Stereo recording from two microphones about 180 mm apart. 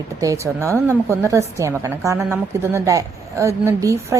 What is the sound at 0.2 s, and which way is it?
A woman's voice, 15° right (ahead or behind).